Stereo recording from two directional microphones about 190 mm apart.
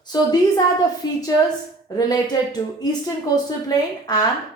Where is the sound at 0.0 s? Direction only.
20° left (ahead or behind).